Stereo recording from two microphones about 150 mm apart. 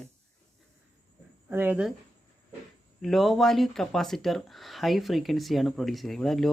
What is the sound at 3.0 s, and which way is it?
Speech, centre (ahead or behind).